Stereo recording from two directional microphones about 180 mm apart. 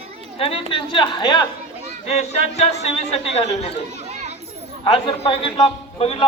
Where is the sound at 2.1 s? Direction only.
35° left (ahead or behind).